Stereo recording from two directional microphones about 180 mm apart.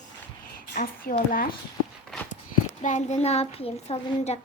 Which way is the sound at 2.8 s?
40° left (ahead or behind).